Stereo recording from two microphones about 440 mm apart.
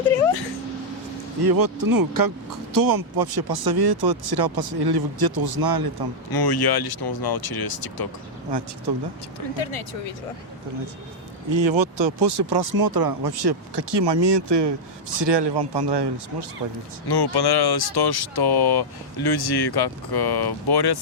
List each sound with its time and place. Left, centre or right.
1.4 s speech: right
6.3 s speech: left
9.6 s speech: left
11.5 s speech: right
17.1 s speech: left